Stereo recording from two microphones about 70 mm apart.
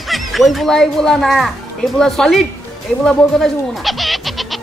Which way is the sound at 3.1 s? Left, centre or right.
Centre.